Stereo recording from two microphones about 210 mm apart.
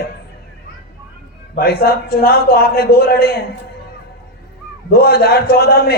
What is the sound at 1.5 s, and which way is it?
A man's voice, 45° left (ahead or behind).